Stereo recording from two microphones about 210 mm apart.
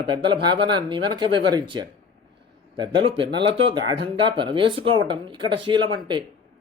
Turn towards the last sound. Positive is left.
turn(degrees=-20)  # may be behind; listen again after turning